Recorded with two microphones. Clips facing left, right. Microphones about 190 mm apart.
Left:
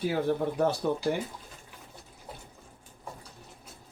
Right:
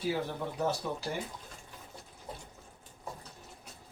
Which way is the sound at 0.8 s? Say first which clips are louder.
Left 8 dB; 60° left (ahead or behind).